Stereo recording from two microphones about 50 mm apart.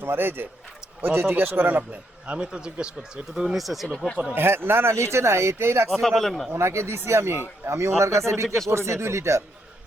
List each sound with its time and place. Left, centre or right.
0.0 s a man's voice: right
2.4 s speech: centre
3.5 s speech: centre
3.8 s speech: centre
4.4 s speech: right
5.9 s speech: centre
6.5 s speech: right
8.4 s speech: centre
8.7 s speech: right